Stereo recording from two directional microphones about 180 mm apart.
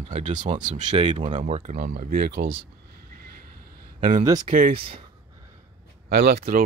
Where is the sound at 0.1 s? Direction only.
45° right (ahead or behind).